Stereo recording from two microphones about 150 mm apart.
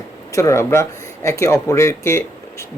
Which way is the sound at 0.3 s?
20° left (ahead or behind).